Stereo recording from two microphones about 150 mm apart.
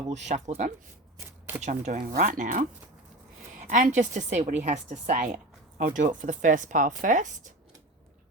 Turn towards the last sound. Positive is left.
turn(degrees=-55)  # may be behind; listen again after turning